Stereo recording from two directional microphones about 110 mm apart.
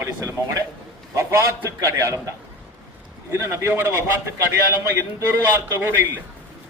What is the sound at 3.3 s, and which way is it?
A man's voice, 25° right (ahead or behind).